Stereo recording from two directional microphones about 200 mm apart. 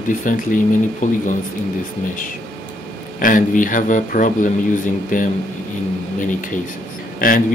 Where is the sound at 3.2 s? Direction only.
40° left (ahead or behind).